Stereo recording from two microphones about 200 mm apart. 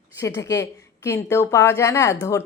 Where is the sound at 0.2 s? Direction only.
15° left (ahead or behind).